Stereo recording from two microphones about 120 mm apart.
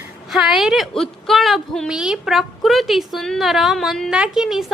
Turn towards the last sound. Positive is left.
turn(degrees=-5)  # may be behind; listen again after turning